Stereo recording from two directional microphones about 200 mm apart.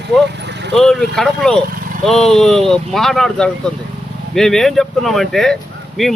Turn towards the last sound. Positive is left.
turn(degrees=0)  # may be behind; listen again after turning